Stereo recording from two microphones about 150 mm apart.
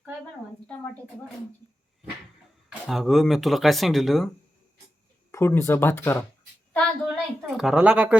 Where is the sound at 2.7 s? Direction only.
Centre (ahead or behind).